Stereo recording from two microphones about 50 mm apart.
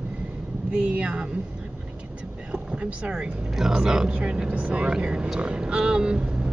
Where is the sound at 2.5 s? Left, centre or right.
Right.